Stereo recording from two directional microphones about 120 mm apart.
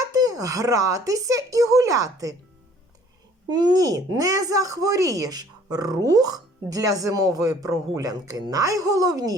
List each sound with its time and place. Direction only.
0.0 s speech: 30° right (ahead or behind)
3.5 s speech: 35° right (ahead or behind)